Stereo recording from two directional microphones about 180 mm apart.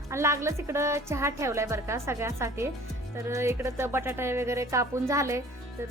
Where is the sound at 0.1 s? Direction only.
15° right (ahead or behind).